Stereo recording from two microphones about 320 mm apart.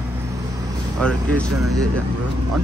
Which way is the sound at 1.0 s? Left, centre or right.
Centre.